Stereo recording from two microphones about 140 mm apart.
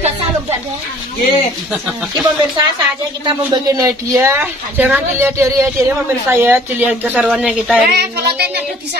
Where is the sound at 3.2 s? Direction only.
30° right (ahead or behind); by 7.8 s 5° right (ahead or behind).